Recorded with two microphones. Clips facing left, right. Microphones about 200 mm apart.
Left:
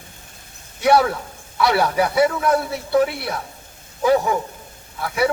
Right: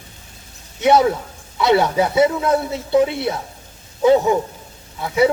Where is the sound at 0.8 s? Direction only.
20° right (ahead or behind).